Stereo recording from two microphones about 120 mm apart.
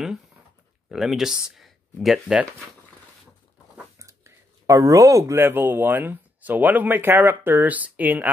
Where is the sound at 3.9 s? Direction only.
25° right (ahead or behind).